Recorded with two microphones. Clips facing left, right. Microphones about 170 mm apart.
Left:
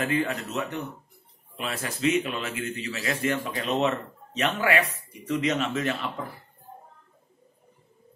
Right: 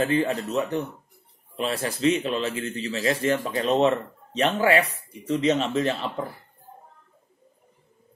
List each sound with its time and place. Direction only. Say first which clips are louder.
0.0 s a man's voice: right 4 dB; 30° right (ahead or behind)